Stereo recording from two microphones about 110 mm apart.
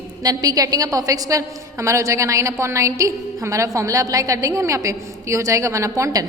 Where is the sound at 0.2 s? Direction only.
35° right (ahead or behind).